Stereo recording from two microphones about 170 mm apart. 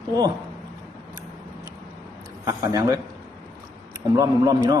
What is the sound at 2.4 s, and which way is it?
Speech, 20° right (ahead or behind).